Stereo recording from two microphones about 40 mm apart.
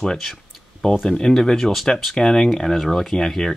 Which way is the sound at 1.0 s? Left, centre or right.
Centre.